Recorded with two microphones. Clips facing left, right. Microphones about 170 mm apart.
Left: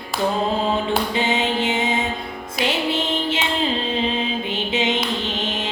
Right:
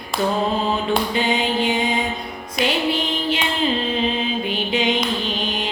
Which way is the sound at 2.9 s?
25° left (ahead or behind).